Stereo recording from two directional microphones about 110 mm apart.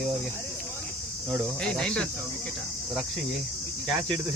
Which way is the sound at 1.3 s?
5° left (ahead or behind).